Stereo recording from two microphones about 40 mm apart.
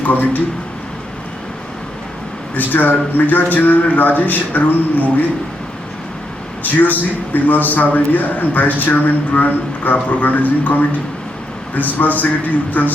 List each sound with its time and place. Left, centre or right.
0.0 s a man's voice: left
2.6 s a man's voice: left
6.6 s a man's voice: left